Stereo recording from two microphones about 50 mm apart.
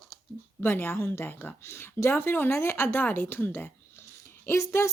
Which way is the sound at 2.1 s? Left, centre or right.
Left.